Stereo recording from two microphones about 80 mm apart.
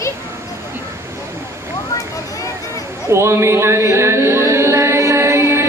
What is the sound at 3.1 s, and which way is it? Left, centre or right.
Music, right.